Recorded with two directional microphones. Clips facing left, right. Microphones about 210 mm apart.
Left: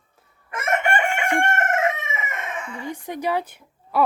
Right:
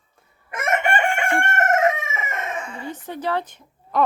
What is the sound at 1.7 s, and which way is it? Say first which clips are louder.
Chicken: right 3 dB; 40° right (ahead or behind).